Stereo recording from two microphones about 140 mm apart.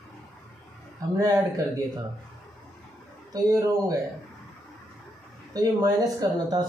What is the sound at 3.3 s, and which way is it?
Speech, 25° right (ahead or behind).